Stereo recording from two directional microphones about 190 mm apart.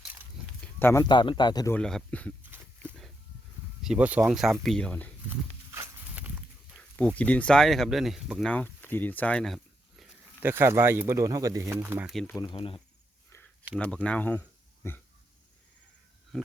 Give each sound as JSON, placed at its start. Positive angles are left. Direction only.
{"t": 0.6, "sound": "a sound", "side_deg": 10}
{"t": 1.0, "sound": "speech", "side_deg": 25}
{"t": 1.7, "sound": "speech", "side_deg": 5}
{"t": 2.4, "sound": "a sound", "side_deg": -10}
{"t": 3.8, "sound": "speech", "side_deg": -5}
{"t": 5.3, "sound": "walk", "side_deg": -10}
{"t": 6.9, "sound": "speech", "side_deg": 5}
{"t": 10.4, "sound": "speech", "side_deg": -10}
{"t": 12.3, "sound": "speech", "side_deg": 20}
{"t": 13.3, "sound": "a sound", "side_deg": 5}
{"t": 13.7, "sound": "speech", "side_deg": 5}